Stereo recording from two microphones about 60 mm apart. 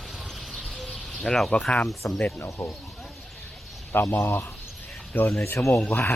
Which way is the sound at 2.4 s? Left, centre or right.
Left.